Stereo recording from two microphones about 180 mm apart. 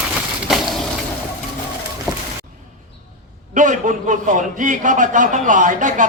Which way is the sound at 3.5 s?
45° right (ahead or behind).